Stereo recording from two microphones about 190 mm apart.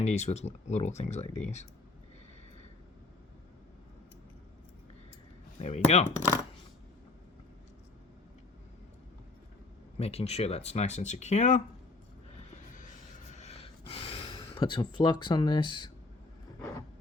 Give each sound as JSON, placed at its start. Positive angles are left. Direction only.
{"t": 0.0, "sound": "speech", "side_deg": 35}
{"t": 5.5, "sound": "speech", "side_deg": 35}
{"t": 10.0, "sound": "speech", "side_deg": 35}
{"t": 12.5, "sound": "music", "side_deg": 40}
{"t": 13.3, "sound": "a sound", "side_deg": 35}
{"t": 14.3, "sound": "speech", "side_deg": 25}